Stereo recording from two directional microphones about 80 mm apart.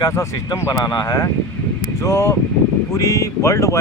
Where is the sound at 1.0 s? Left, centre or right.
Left.